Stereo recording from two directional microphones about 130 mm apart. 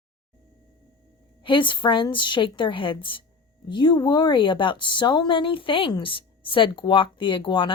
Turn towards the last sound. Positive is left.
turn(degrees=40)  # may be behind; listen again after turning